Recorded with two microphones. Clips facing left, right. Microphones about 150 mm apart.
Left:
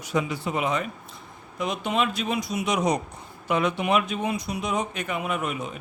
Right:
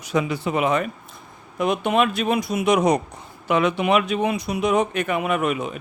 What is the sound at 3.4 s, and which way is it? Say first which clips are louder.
Speech: right 4 dB; 85° right.